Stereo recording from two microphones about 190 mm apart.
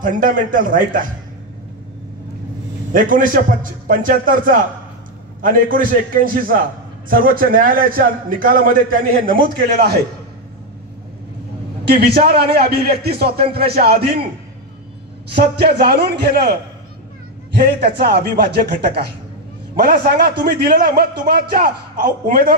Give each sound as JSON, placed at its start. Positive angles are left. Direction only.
{"t": 0.0, "sound": "a man's voice", "side_deg": -45}
{"t": 2.9, "sound": "a man's voice", "side_deg": -45}
{"t": 11.8, "sound": "a man's voice", "side_deg": -55}
{"t": 15.8, "sound": "a man's voice", "side_deg": -55}
{"t": 17.6, "sound": "a man's voice", "side_deg": -60}